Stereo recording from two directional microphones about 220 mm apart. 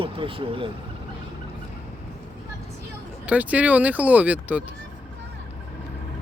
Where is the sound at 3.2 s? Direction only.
5° right (ahead or behind).